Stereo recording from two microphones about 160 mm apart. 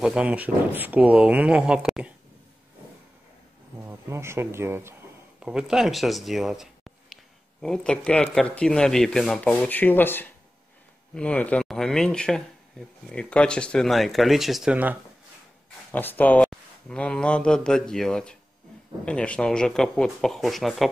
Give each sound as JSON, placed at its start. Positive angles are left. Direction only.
{"t": 0.0, "sound": "speech", "side_deg": -5}
{"t": 3.8, "sound": "speech", "side_deg": -15}
{"t": 5.4, "sound": "speech", "side_deg": -5}
{"t": 15.9, "sound": "speech", "side_deg": 10}